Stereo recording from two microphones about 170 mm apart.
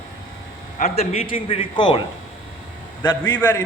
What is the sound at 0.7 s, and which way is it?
A man's voice, 40° left (ahead or behind).